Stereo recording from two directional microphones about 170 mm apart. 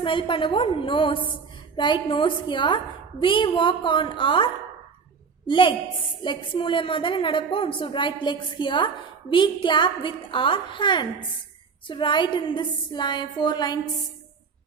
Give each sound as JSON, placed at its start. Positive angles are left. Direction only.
{"t": 0.0, "sound": "a woman's voice", "side_deg": 30}
{"t": 5.5, "sound": "a woman's voice", "side_deg": 30}